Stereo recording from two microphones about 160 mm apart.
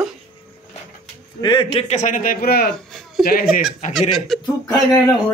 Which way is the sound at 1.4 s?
30° left (ahead or behind).